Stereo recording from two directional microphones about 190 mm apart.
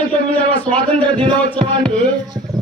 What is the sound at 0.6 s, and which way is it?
Speech, 5° left (ahead or behind).